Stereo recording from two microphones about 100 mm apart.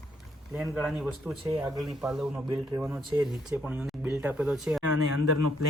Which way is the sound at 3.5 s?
20° right (ahead or behind).